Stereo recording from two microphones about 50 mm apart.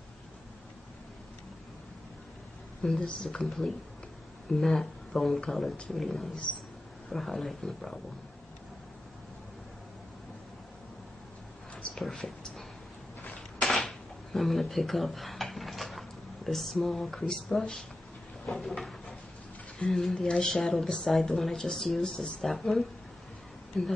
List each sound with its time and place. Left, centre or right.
2.8 s speech: centre
11.7 s a sound: centre
12.3 s speech: centre
13.7 s speech: centre
18.4 s a sound: centre
19.9 s speech: centre